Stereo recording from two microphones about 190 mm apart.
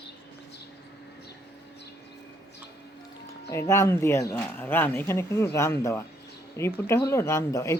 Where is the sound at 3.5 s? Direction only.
15° left (ahead or behind).